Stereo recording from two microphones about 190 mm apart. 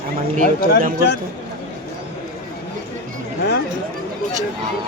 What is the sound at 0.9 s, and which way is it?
Speech, 60° left (ahead or behind).